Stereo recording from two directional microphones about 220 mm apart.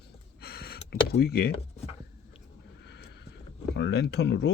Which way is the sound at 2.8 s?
50° left (ahead or behind).